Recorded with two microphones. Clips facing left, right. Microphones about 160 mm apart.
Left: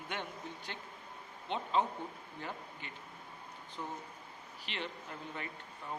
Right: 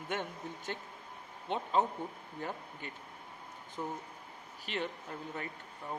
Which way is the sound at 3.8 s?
35° right (ahead or behind).